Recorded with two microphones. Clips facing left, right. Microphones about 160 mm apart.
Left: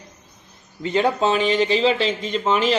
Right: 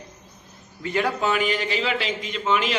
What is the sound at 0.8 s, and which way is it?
A man's voice, 25° left (ahead or behind).